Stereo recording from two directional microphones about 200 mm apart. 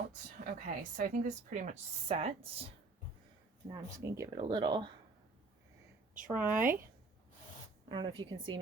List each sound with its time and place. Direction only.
0.3 s a woman's voice: 45° right (ahead or behind)
3.7 s speech: 15° right (ahead or behind)
6.2 s speech: 10° right (ahead or behind)
7.9 s speech: 25° right (ahead or behind)